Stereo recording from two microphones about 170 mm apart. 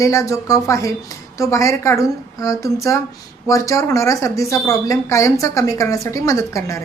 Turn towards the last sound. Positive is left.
turn(degrees=15)  # may be behind; listen again after turning